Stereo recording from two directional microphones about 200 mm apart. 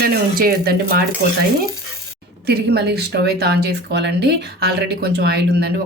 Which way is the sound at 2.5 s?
55° right (ahead or behind).